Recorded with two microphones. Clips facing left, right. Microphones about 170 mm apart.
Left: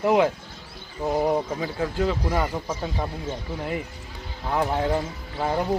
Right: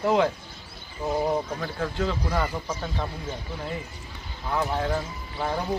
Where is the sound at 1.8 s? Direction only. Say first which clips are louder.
Left 3 dB; 5° left (ahead or behind).